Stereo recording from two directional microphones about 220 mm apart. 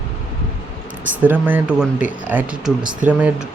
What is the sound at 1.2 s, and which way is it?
Speech, 10° right (ahead or behind).